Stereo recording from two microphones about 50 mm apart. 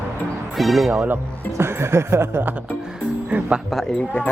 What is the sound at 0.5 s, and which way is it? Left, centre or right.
Speech, centre.